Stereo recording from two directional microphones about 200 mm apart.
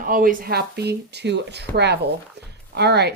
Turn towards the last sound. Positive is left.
turn(degrees=-55)  # may be behind; listen again after turning